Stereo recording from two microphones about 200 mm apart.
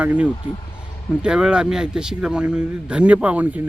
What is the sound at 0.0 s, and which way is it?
A man's voice, 5° right (ahead or behind).